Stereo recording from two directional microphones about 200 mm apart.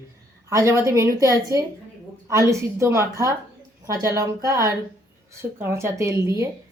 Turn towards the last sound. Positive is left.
turn(degrees=-15)  # may be behind; listen again after turning